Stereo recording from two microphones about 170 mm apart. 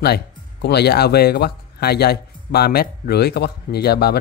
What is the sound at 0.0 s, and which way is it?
Speech, 75° left (ahead or behind).